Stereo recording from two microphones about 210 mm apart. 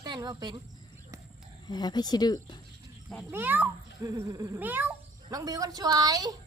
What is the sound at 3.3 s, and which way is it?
A child's voice, 10° right (ahead or behind).